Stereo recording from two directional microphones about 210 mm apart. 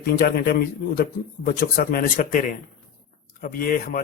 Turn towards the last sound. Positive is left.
turn(degrees=40)  # may be behind; listen again after turning